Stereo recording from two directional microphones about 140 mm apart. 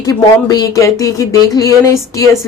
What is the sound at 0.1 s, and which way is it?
A woman's voice, 25° left (ahead or behind).